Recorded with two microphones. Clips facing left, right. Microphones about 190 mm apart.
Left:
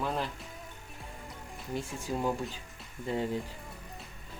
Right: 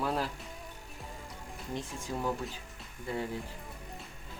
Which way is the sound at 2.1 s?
20° left (ahead or behind).